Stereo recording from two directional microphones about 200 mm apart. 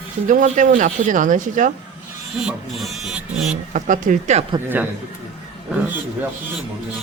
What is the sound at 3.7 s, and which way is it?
Speech, 40° right (ahead or behind).